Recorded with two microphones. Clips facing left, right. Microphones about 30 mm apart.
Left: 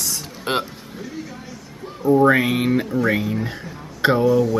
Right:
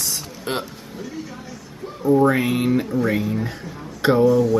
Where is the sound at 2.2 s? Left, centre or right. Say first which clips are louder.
Left 2 dB; centre.